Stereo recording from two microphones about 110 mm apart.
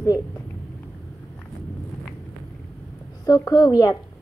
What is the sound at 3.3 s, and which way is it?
Speech, 35° left (ahead or behind).